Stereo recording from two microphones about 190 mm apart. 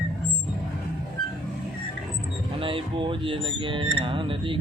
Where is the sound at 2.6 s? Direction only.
25° right (ahead or behind).